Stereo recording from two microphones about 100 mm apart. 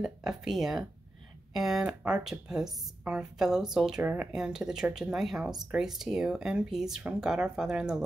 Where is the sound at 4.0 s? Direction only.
15° right (ahead or behind).